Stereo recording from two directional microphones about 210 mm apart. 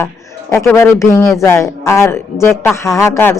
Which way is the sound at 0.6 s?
10° left (ahead or behind).